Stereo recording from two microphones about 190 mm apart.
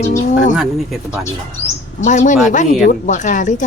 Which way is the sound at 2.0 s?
40° left (ahead or behind).